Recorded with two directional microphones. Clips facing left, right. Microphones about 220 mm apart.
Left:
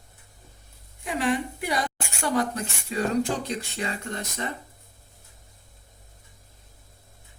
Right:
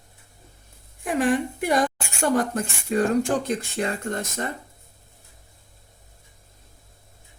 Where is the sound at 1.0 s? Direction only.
50° right (ahead or behind).